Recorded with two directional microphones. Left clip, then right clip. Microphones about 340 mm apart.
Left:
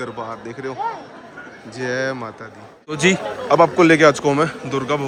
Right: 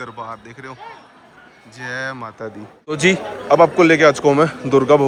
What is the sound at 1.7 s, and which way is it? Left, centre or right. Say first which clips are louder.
A man's voice: left 3 dB; centre.